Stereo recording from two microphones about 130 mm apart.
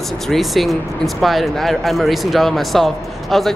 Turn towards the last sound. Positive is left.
turn(degrees=0)  # may be behind; listen again after turning